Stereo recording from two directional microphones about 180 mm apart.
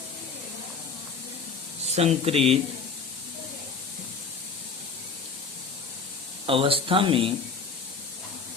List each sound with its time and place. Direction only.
2.0 s speech: 35° right (ahead or behind)
6.4 s speech: 30° right (ahead or behind)